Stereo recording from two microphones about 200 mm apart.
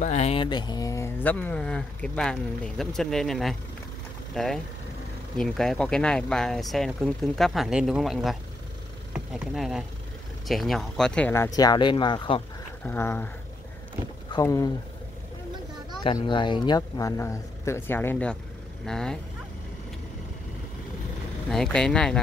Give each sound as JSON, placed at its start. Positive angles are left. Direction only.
{"t": 0.0, "sound": "speech", "side_deg": 35}
{"t": 12.8, "sound": "speech", "side_deg": 10}
{"t": 14.3, "sound": "speech", "side_deg": 15}
{"t": 16.0, "sound": "speech", "side_deg": 25}
{"t": 21.5, "sound": "speech", "side_deg": 0}